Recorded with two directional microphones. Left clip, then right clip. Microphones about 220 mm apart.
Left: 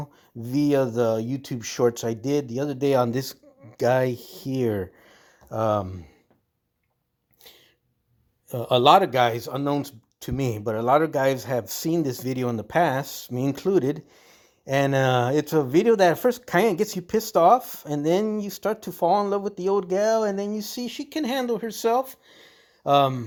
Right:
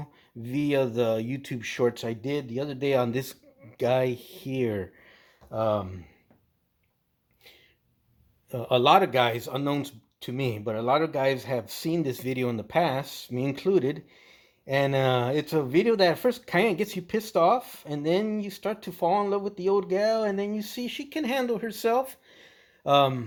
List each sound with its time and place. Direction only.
0.0 s speech: 30° left (ahead or behind)
8.4 s speech: 35° left (ahead or behind)